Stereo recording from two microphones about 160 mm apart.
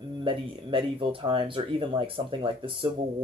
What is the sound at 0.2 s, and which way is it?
A man's voice, 30° right (ahead or behind).